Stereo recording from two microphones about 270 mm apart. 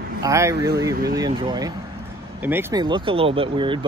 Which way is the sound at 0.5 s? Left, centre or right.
Right.